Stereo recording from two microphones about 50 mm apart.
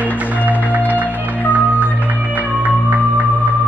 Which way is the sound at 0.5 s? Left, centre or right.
Right.